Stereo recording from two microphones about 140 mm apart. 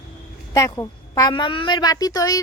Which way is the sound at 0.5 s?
25° left (ahead or behind).